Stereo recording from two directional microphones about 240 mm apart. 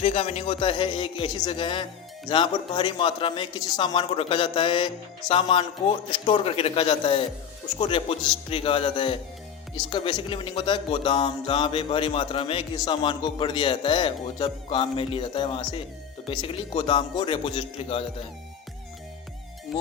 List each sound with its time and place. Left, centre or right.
0.0 s speech: left